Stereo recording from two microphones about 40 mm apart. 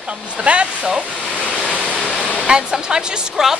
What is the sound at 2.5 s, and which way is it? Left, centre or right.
Speech, centre.